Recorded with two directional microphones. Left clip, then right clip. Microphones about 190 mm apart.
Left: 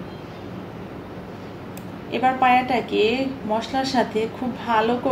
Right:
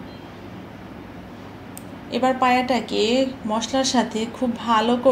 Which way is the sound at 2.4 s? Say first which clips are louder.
Left 3 dB; 45° right (ahead or behind).